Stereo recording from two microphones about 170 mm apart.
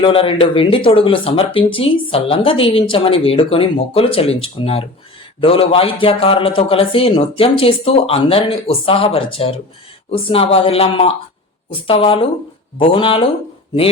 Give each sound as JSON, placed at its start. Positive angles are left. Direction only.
{"t": 0.0, "sound": "speech", "side_deg": 30}